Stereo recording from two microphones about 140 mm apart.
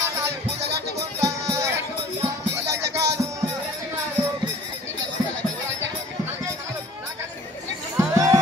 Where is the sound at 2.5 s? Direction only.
20° right (ahead or behind).